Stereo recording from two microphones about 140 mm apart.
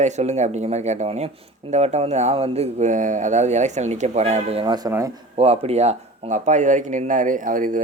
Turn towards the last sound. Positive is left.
turn(degrees=-70)  # may be behind; listen again after turning